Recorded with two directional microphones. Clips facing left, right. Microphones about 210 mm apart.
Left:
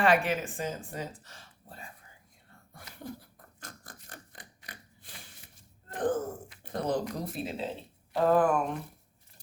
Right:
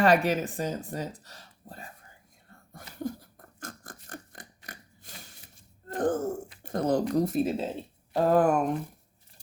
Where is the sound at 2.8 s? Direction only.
40° right (ahead or behind).